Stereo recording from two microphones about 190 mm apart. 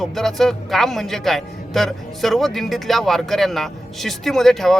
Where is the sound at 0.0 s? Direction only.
Centre (ahead or behind).